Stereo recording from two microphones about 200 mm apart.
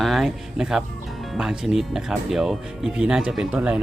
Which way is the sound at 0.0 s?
Centre (ahead or behind).